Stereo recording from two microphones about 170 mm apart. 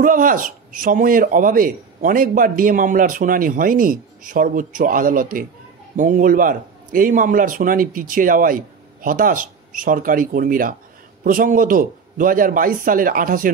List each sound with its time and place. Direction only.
0.0 s a man's voice: 50° right (ahead or behind)